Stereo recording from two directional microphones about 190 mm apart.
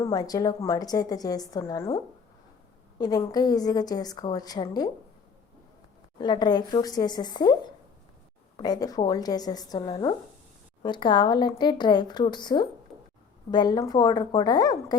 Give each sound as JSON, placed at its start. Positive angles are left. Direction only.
{"t": 0.0, "sound": "a woman's voice", "side_deg": 20}
{"t": 3.0, "sound": "a woman's voice", "side_deg": 20}
{"t": 6.1, "sound": "a woman's voice", "side_deg": 25}
{"t": 12.9, "sound": "a sound", "side_deg": 0}
{"t": 13.5, "sound": "a woman's voice", "side_deg": 20}